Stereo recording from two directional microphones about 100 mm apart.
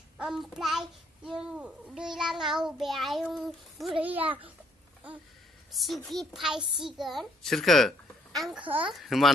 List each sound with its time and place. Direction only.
0.2 s a child's voice: 5° right (ahead or behind)
4.0 s a child's voice: 15° right (ahead or behind)
5.7 s a child's voice: centre (ahead or behind)
8.5 s a child's voice: 15° right (ahead or behind)
8.9 s a child's voice: centre (ahead or behind)